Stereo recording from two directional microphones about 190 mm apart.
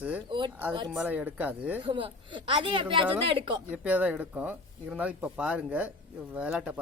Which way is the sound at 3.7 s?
10° right (ahead or behind).